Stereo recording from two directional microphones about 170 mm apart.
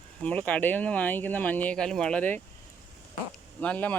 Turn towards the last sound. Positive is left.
turn(degrees=10)  # may be behind; listen again after turning